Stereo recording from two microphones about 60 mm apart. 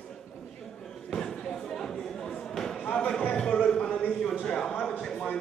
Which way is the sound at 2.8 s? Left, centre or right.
Left.